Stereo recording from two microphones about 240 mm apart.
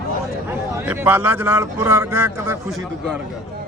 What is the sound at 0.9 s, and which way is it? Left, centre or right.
A man's voice, centre.